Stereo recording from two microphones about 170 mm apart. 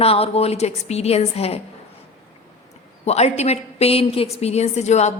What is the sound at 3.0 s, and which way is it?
A woman's voice, 40° left (ahead or behind).